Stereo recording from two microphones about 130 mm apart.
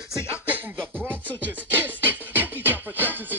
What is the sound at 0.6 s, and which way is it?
Music, 15° right (ahead or behind).